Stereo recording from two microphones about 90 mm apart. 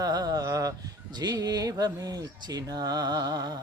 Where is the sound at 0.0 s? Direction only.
45° right (ahead or behind).